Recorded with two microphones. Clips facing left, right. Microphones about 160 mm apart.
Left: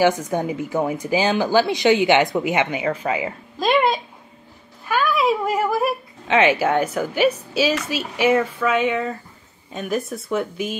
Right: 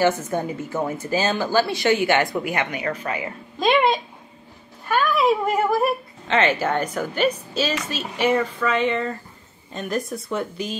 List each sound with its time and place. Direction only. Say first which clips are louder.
0.0 s a woman's voice: left 2 dB; 10° left (ahead or behind)
3.5 s a sound: even; centre (ahead or behind)
7.5 s a woman's voice: left 4 dB; 10° left (ahead or behind)